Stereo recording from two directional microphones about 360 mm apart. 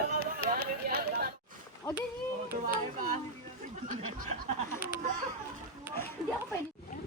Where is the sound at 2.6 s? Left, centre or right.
Right.